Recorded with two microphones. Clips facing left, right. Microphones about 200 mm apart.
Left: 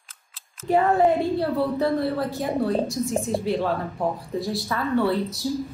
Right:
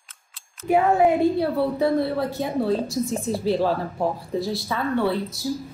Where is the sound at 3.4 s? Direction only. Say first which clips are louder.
Right 6 dB; 30° right (ahead or behind).